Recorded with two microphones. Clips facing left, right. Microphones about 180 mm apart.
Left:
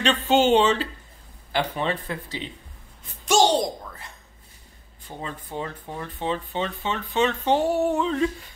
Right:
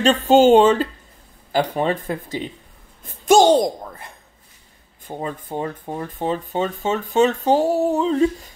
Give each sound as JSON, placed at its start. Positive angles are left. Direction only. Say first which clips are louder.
{"t": 0.0, "sound": "speech", "louder": "right 7 dB", "side_deg": -40}
{"t": 3.0, "sound": "a sound", "louder": "right 6 dB", "side_deg": -50}
{"t": 5.0, "sound": "speech", "louder": "right 7 dB", "side_deg": -50}